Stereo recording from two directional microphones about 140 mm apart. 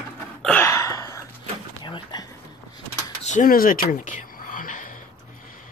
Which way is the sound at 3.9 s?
65° left (ahead or behind).